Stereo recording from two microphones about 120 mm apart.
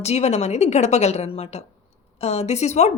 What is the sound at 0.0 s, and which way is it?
A woman's voice, 65° left (ahead or behind).